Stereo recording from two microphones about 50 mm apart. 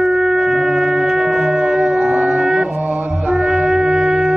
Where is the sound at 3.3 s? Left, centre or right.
Centre.